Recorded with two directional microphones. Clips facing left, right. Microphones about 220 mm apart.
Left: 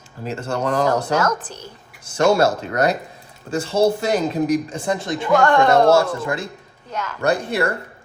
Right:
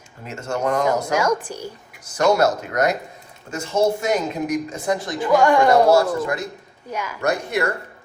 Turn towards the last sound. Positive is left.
turn(degrees=30)  # may be behind; listen again after turning